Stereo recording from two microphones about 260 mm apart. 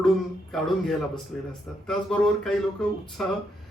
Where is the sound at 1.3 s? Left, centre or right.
Centre.